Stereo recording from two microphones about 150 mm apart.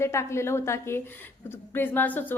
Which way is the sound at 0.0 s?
20° left (ahead or behind).